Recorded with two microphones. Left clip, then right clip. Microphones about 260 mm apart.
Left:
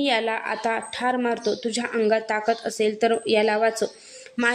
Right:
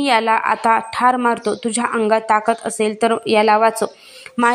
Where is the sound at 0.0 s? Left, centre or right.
Centre.